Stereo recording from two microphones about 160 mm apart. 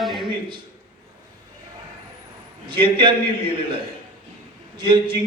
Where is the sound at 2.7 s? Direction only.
30° right (ahead or behind).